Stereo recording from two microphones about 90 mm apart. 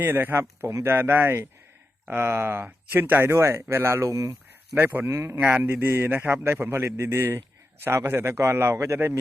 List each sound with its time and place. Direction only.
0.0 s a man's voice: 25° right (ahead or behind)
4.7 s a man's voice: 20° right (ahead or behind)